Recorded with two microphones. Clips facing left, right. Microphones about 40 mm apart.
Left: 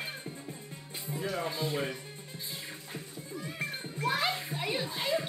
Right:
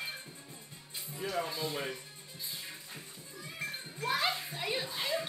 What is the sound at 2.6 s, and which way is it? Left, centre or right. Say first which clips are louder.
Music: left 4 dB; left.